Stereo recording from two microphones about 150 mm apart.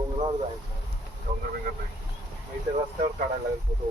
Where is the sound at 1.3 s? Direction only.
50° right (ahead or behind).